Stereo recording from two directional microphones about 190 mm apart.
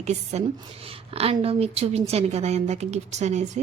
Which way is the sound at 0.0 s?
35° right (ahead or behind).